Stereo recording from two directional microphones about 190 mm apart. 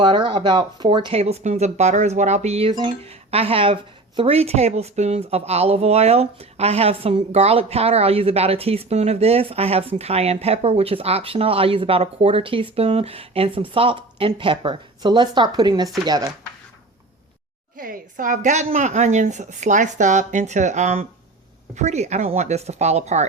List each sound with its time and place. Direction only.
0.0 s speech: 25° right (ahead or behind)
17.7 s speech: 45° right (ahead or behind)